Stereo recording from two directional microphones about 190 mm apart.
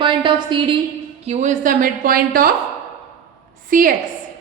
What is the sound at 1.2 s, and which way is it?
A woman's voice, 35° right (ahead or behind).